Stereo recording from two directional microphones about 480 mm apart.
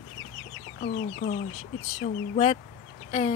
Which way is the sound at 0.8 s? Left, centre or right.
Centre.